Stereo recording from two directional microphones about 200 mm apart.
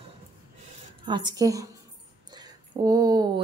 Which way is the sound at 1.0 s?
20° right (ahead or behind).